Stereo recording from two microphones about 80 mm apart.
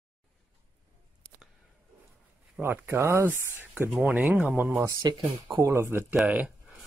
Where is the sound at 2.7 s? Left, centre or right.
Right.